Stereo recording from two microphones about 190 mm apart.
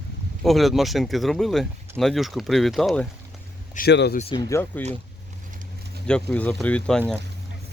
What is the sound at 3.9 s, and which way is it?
Speech, 65° left (ahead or behind).